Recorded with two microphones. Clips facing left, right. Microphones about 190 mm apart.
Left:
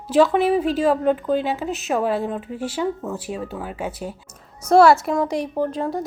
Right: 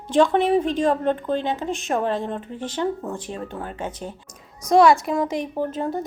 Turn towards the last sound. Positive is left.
turn(degrees=0)  # may be behind; listen again after turning